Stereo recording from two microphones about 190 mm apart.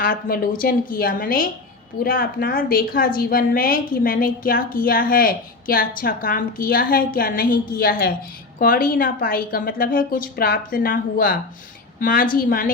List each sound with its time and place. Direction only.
0.0 s a woman's voice: 45° left (ahead or behind)